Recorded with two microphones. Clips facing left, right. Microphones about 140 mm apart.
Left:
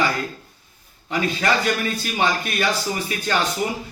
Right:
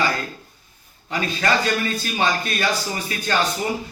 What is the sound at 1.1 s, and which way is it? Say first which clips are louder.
A man's voice: left 1 dB; 15° left (ahead or behind).